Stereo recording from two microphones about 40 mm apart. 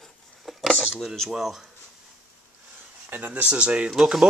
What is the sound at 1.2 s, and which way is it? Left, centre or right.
Speech, centre.